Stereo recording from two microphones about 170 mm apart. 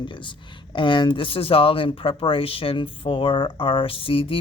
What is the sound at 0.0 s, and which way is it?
Speech, 30° left (ahead or behind).